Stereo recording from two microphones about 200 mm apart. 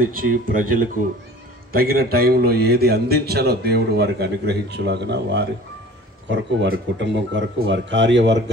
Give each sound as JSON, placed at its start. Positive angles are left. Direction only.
{"t": 0.0, "sound": "a man's voice", "side_deg": -45}